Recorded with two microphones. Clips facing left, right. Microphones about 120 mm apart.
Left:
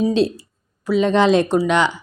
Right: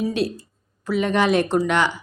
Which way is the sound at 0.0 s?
25° left (ahead or behind).